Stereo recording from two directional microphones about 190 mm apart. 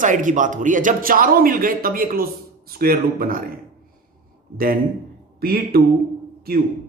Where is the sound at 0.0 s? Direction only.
45° right (ahead or behind).